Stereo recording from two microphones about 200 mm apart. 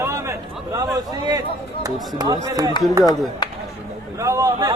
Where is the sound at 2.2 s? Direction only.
20° right (ahead or behind).